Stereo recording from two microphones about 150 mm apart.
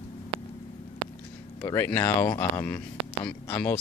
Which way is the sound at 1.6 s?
20° left (ahead or behind).